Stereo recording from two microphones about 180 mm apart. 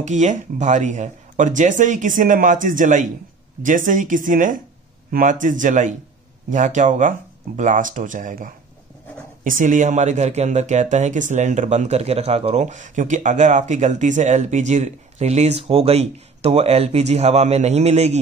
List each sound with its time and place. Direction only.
0.0 s speech: 40° right (ahead or behind)